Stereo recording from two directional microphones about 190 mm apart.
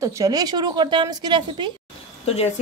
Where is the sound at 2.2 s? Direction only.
30° left (ahead or behind).